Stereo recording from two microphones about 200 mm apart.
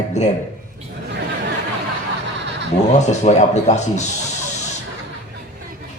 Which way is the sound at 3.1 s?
35° left (ahead or behind).